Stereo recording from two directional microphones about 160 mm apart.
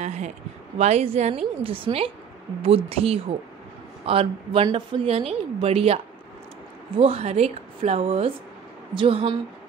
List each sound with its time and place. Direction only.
0.0 s a woman's voice: 45° right (ahead or behind)
7.0 s a woman's voice: 40° right (ahead or behind)